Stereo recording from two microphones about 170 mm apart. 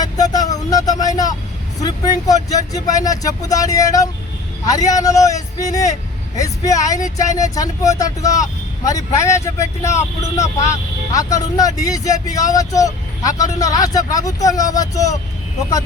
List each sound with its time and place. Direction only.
0.0 s vehicle: 20° left (ahead or behind)
1.8 s speech: 20° left (ahead or behind)